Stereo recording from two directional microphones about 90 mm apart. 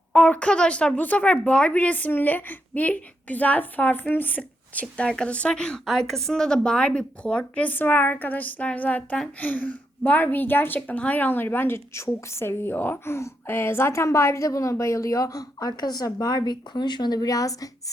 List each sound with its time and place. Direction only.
0.1 s a woman's voice: 15° left (ahead or behind); by 17.9 s 40° left (ahead or behind)